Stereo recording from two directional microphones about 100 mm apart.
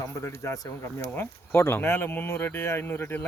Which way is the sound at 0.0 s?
30° left (ahead or behind).